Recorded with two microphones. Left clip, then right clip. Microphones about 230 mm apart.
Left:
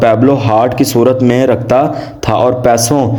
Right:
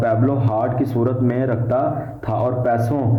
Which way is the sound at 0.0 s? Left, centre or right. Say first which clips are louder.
Left 10 dB; left.